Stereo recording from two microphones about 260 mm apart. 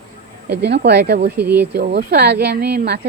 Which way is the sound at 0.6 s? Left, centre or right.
Right.